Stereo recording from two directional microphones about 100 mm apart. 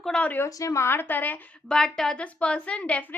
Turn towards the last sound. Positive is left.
turn(degrees=15)  # may be behind; listen again after turning